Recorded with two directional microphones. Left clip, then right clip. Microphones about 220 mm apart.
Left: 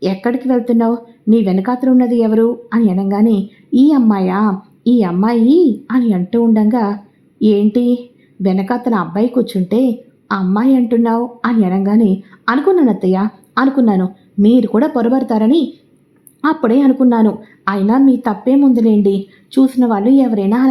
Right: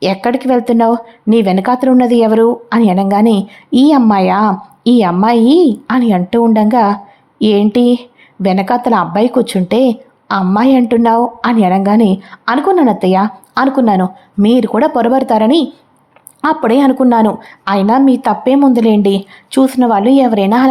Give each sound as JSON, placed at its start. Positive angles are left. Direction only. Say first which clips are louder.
{"t": 0.0, "sound": "speech", "louder": "right 4 dB", "side_deg": -20}